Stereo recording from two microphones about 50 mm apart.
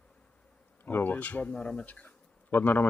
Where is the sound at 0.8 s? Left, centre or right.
Left.